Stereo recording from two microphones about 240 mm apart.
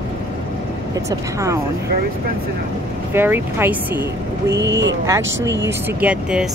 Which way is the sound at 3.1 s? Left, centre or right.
Centre.